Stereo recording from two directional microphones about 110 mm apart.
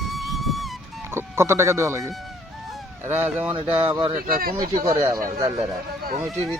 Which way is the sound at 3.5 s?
45° right (ahead or behind).